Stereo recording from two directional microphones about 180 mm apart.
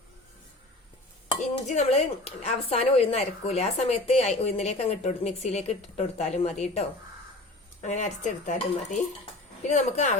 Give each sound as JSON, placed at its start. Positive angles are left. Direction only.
{"t": 1.6, "sound": "a woman's voice", "side_deg": 35}